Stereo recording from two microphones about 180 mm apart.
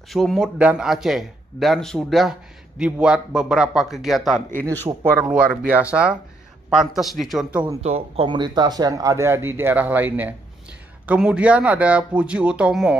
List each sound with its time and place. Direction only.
0.1 s a man's voice: centre (ahead or behind)
7.8 s speech: 35° right (ahead or behind)
8.3 s speech: 25° right (ahead or behind); by 12.9 s 5° right (ahead or behind)